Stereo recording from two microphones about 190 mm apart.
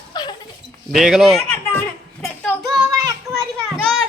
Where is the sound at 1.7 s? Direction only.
5° left (ahead or behind).